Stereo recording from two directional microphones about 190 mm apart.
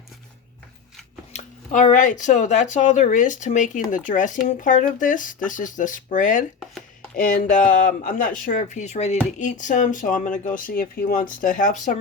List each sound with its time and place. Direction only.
1.3 s speech: 40° left (ahead or behind)